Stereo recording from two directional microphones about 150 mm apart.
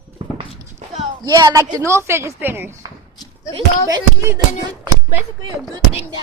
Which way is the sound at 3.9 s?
20° right (ahead or behind).